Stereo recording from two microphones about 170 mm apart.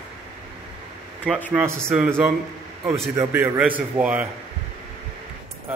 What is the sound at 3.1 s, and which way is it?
Speech, 15° right (ahead or behind).